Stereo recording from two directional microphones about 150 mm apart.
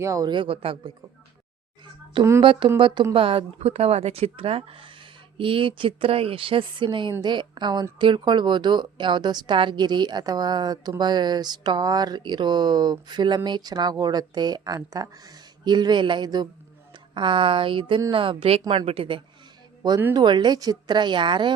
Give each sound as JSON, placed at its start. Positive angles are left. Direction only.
{"t": 0.0, "sound": "a woman's voice", "side_deg": -20}
{"t": 2.4, "sound": "a woman's voice", "side_deg": -35}